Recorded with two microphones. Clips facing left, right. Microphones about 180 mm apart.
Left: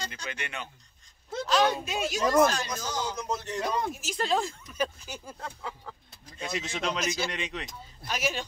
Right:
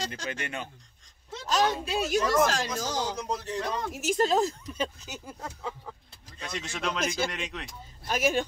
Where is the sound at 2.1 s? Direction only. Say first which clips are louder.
Left 2 dB; 90° right.